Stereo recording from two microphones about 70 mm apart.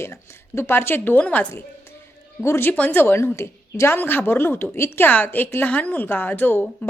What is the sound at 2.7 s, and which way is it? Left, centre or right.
A woman's voice, left.